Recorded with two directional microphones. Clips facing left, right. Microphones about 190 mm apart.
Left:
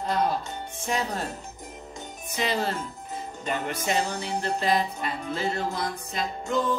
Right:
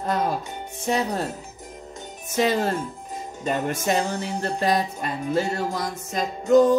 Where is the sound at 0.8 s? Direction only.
35° right (ahead or behind).